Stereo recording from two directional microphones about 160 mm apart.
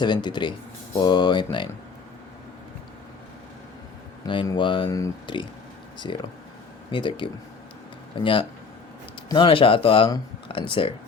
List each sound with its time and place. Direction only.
0.0 s speech: 30° left (ahead or behind)
4.3 s speech: 30° left (ahead or behind)